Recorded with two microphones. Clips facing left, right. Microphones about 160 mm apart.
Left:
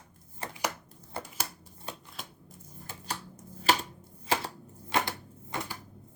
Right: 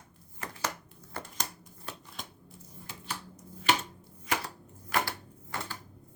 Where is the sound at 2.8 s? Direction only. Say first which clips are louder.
Left 2 dB; 40° left (ahead or behind); by 5.7 s 20° left (ahead or behind).